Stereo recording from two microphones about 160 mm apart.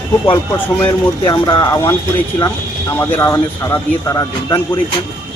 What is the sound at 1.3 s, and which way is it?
Speech, 25° left (ahead or behind).